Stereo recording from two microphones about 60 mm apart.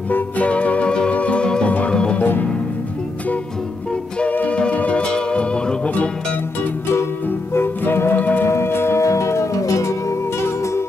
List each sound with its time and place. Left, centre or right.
0.1 s music: left
4.2 s music: left
7.2 s music: left
8.5 s music: left
9.0 s music: left